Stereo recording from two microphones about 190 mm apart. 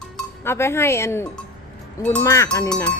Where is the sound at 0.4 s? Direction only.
15° left (ahead or behind).